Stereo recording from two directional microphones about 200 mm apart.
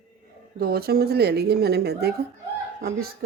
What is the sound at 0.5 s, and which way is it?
A woman's voice, 50° right (ahead or behind).